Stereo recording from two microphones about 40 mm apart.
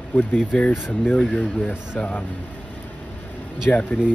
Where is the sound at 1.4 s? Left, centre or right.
Left.